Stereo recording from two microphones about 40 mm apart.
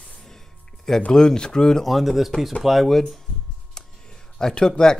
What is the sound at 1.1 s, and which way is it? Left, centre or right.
Speech, centre.